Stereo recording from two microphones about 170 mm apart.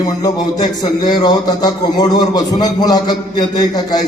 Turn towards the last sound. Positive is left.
turn(degrees=25)  # may be behind; listen again after turning